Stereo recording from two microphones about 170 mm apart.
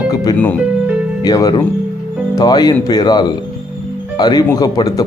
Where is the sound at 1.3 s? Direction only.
20° left (ahead or behind).